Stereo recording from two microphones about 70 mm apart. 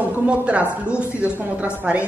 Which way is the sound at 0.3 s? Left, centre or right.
Centre.